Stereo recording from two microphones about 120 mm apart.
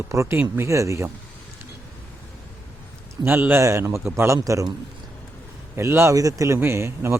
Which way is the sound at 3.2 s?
20° right (ahead or behind).